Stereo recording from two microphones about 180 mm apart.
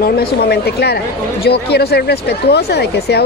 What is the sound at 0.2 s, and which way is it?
Speech, 60° left (ahead or behind).